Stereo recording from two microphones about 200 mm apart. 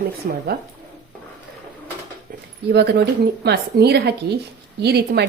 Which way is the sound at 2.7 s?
55° right (ahead or behind).